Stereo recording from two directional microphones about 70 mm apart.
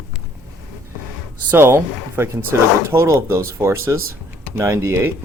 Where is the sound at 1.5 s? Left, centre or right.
Right.